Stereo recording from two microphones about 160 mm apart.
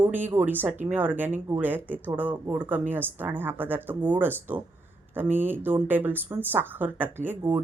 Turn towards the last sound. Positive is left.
turn(degrees=-10)  # may be behind; listen again after turning